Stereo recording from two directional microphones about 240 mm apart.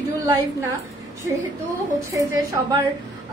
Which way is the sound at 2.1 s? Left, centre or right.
Centre.